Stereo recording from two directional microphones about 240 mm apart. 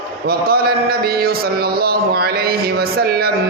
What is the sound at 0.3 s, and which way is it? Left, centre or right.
A man's voice, right.